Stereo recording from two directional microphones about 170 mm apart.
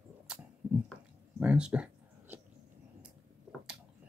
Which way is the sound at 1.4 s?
5° right (ahead or behind).